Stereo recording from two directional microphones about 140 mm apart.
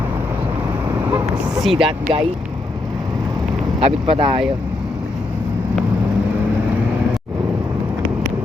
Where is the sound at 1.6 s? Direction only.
Centre (ahead or behind).